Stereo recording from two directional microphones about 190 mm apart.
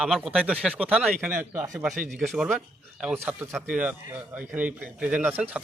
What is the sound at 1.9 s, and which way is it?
Speech, 40° right (ahead or behind).